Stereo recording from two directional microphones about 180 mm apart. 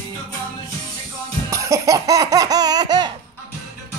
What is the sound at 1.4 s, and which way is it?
Baby laughter, 15° right (ahead or behind).